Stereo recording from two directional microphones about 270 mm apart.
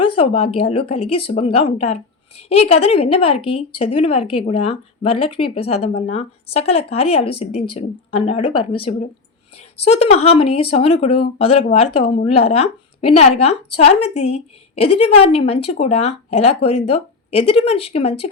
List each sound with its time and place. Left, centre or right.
0.0 s a woman's voice: centre